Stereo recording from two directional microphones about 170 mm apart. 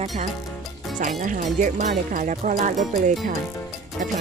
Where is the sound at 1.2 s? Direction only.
50° right (ahead or behind).